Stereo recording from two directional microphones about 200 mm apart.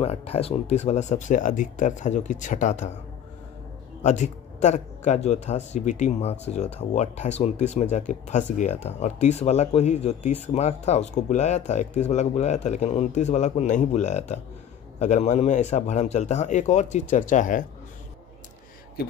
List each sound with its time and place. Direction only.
0.0 s speech: 30° left (ahead or behind)
4.0 s speech: 35° left (ahead or behind)